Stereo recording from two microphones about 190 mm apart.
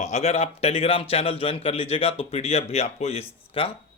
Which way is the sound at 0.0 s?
35° left (ahead or behind).